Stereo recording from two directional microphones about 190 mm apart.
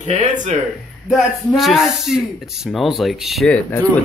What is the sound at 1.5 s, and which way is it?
Speech, centre (ahead or behind).